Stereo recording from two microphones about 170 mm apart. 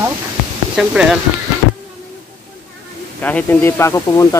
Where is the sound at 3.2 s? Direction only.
10° left (ahead or behind).